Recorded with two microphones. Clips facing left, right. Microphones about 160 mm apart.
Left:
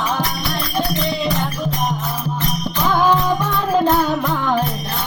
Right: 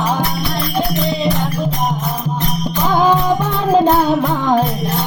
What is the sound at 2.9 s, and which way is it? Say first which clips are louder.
Music: right 2 dB; 20° right (ahead or behind).